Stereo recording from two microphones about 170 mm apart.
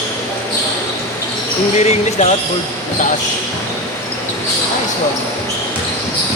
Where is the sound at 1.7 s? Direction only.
40° left (ahead or behind).